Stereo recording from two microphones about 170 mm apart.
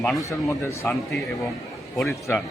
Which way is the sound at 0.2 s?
15° left (ahead or behind).